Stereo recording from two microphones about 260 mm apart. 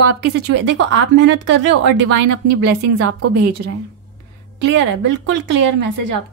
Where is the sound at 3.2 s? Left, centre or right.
Right.